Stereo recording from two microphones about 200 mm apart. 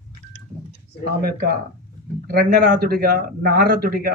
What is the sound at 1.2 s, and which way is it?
A man's voice, 50° right (ahead or behind).